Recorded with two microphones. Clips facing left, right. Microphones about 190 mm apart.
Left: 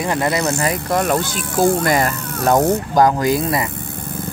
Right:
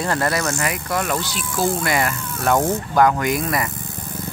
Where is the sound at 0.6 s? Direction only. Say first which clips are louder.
Left 5 dB; 35° left (ahead or behind).